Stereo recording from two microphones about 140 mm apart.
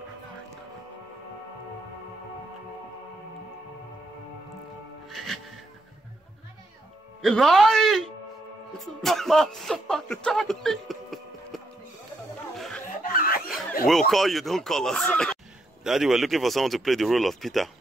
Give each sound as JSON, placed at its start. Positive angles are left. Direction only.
{"t": 5.1, "sound": "music", "side_deg": 0}
{"t": 7.2, "sound": "speech", "side_deg": 0}
{"t": 12.5, "sound": "chicken", "side_deg": 0}
{"t": 13.0, "sound": "snicker", "side_deg": 85}
{"t": 13.8, "sound": "speech", "side_deg": 0}